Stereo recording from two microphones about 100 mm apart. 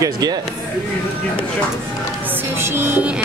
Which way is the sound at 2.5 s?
25° right (ahead or behind).